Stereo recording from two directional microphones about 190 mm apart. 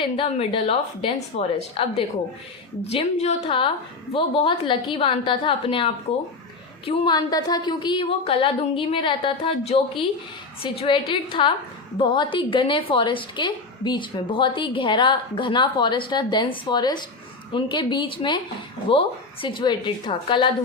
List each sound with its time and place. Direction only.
0.0 s a woman's voice: 30° left (ahead or behind)